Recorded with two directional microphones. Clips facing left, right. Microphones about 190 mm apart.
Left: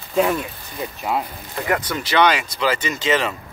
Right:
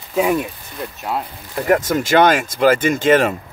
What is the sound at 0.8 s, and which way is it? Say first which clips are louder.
Speech: left 1 dB; centre (ahead or behind).